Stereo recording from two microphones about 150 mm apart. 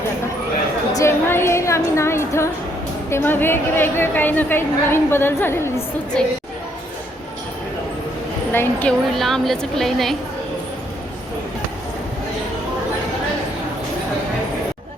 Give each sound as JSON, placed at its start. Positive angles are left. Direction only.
{"t": 0.9, "sound": "music", "side_deg": 15}
{"t": 3.1, "sound": "a woman's voice", "side_deg": 15}
{"t": 6.1, "sound": "a woman's voice", "side_deg": 5}
{"t": 8.5, "sound": "a woman's voice", "side_deg": 15}
{"t": 9.1, "sound": "a woman's voice", "side_deg": 0}